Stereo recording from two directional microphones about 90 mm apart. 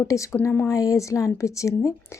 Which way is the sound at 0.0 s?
35° left (ahead or behind).